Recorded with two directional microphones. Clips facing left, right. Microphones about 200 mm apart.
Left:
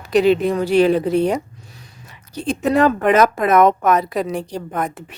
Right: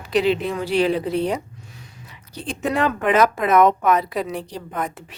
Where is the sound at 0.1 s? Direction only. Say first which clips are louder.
Left 5 dB; 45° left (ahead or behind).